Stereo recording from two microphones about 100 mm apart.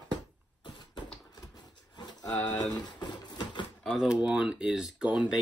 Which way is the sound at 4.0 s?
10° right (ahead or behind).